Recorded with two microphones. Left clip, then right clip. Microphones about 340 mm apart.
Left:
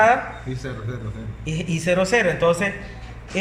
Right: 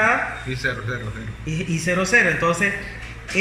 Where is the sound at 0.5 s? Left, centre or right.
Centre.